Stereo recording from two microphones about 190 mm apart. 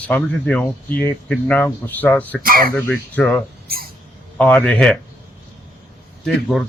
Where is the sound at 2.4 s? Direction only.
50° right (ahead or behind).